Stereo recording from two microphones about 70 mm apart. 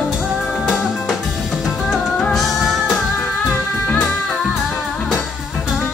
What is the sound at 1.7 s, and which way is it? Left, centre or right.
Music, centre.